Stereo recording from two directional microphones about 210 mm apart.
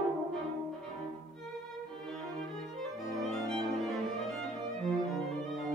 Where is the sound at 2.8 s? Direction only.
Centre (ahead or behind).